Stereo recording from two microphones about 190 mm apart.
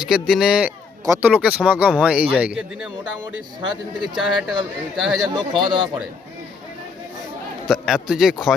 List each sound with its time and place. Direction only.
0.0 s speech: centre (ahead or behind)
1.0 s speech: 15° right (ahead or behind)
4.1 s speech: centre (ahead or behind)
5.4 s speech: 25° right (ahead or behind)
7.7 s speech: centre (ahead or behind)